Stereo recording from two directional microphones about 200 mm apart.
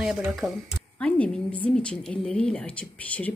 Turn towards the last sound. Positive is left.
turn(degrees=5)  # may be behind; listen again after turning